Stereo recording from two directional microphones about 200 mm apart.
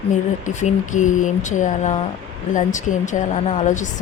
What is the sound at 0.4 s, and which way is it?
Speech, 40° left (ahead or behind).